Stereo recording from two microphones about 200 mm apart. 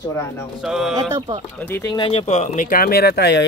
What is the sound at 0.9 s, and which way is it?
Speech, 20° right (ahead or behind).